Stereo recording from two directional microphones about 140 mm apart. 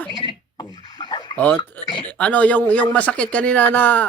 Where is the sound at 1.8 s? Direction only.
15° left (ahead or behind).